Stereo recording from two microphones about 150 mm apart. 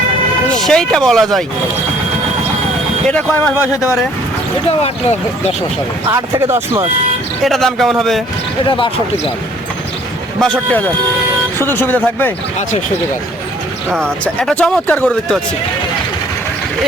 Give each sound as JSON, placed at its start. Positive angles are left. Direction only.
{"t": 0.5, "sound": "speech", "side_deg": 5}
{"t": 3.1, "sound": "speech", "side_deg": 10}
{"t": 6.1, "sound": "speech", "side_deg": -20}
{"t": 7.4, "sound": "speech", "side_deg": 0}
{"t": 10.4, "sound": "speech", "side_deg": 5}
{"t": 13.9, "sound": "speech", "side_deg": 5}